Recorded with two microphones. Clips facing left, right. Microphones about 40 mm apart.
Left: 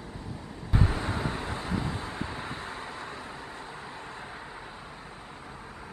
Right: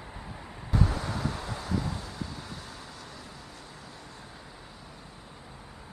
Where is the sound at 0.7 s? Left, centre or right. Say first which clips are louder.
Left 1 dB; left.